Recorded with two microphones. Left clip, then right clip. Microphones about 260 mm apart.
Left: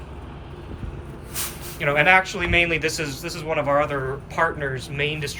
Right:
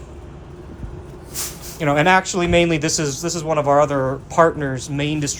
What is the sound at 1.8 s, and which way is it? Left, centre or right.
A man's voice, centre.